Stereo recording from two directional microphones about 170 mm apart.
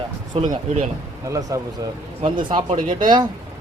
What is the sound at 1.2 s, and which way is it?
Speech, 20° right (ahead or behind).